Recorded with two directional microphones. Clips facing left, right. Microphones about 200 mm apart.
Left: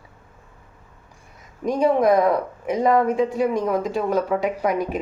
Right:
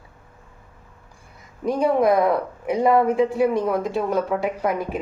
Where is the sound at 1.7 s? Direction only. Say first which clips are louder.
Left 1 dB; 5° right (ahead or behind).